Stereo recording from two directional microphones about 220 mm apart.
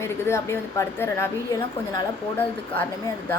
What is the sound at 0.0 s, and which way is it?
A woman's voice, 10° left (ahead or behind).